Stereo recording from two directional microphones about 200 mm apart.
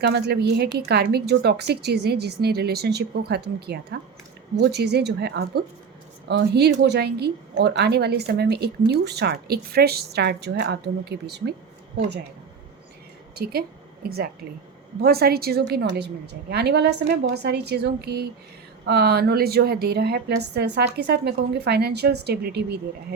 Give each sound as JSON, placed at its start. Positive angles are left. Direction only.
{"t": 0.0, "sound": "a woman's voice", "side_deg": -55}
{"t": 13.3, "sound": "a woman's voice", "side_deg": -50}